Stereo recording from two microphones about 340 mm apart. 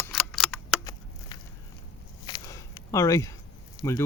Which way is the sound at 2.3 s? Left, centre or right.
Centre.